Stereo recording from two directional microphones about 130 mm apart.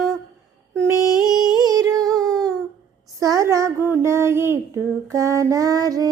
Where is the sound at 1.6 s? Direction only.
30° right (ahead or behind).